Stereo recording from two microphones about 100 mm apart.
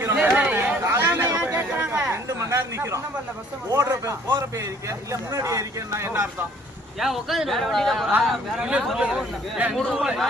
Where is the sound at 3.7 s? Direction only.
30° right (ahead or behind).